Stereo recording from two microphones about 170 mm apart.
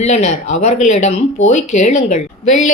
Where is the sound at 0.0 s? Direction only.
40° left (ahead or behind).